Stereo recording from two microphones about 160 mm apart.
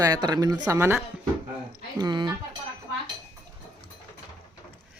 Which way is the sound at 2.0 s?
25° right (ahead or behind).